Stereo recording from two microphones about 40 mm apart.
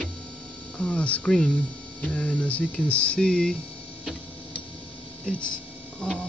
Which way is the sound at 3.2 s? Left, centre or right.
Centre.